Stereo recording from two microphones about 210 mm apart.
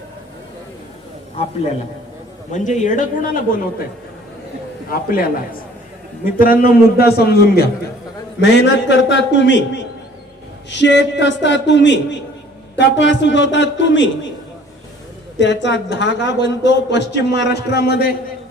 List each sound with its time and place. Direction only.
2.5 s speech: 35° left (ahead or behind)
4.9 s a man's voice: 45° left (ahead or behind)
6.4 s a man's voice: 45° left (ahead or behind); by 9.6 s 60° left (ahead or behind)
10.7 s a man's voice: 55° left (ahead or behind)
15.4 s a man's voice: 55° left (ahead or behind)